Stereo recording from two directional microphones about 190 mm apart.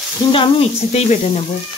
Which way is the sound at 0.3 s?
30° left (ahead or behind).